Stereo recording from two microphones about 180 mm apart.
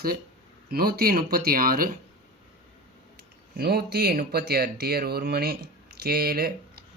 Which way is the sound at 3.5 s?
60° right (ahead or behind).